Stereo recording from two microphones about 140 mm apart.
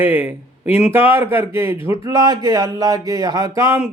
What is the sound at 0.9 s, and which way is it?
Speech, 40° left (ahead or behind).